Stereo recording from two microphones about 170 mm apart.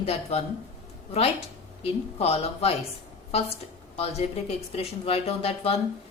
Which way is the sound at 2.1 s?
35° left (ahead or behind).